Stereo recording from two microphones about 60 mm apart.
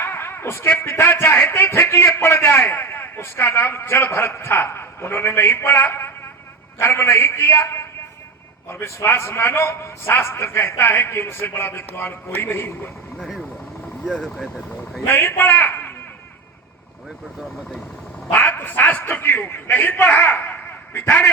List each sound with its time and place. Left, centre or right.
0.0 s a man's voice: left
13.1 s vehicle: centre
14.1 s speech: centre
15.0 s a man's voice: left
18.3 s a man's voice: left